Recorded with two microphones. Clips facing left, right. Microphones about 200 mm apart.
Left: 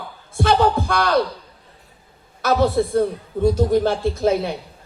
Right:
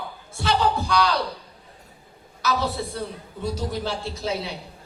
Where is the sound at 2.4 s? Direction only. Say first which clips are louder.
Left 8 dB; 55° left (ahead or behind).